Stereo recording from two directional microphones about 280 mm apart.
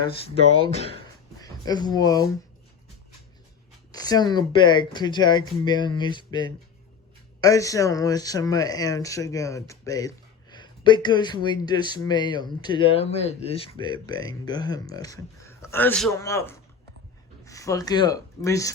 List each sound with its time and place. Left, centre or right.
0.6 s speech: left
3.9 s speech: centre